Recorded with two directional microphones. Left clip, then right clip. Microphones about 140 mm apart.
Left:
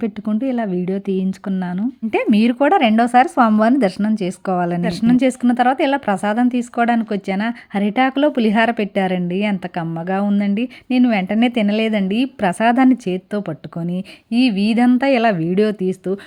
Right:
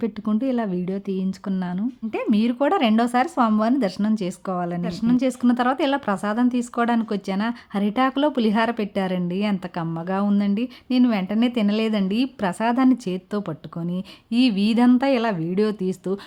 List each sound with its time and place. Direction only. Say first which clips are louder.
0.3 s a woman's voice: left 3 dB; 5° left (ahead or behind)
0.9 s a woman's voice: left 6 dB; 20° left (ahead or behind)
2.0 s speech: left 7 dB; 30° left (ahead or behind)
4.4 s speech: left 9 dB; 30° left (ahead or behind)
5.4 s a woman's voice: left 5 dB; 15° left (ahead or behind)